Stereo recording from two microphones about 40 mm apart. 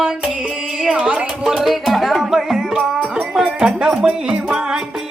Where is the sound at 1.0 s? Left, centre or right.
Right.